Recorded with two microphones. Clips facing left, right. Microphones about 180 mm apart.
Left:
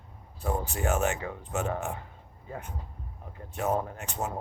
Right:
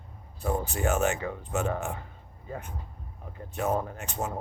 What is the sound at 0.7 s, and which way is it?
Speech, 35° right (ahead or behind).